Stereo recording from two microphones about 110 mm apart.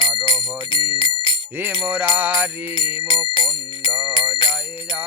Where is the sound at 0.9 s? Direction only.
45° left (ahead or behind).